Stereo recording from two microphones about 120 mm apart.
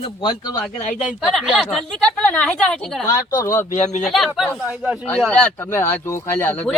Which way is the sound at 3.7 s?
80° left.